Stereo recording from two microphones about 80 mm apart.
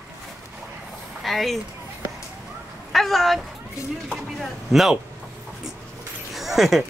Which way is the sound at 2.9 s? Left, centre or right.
Centre.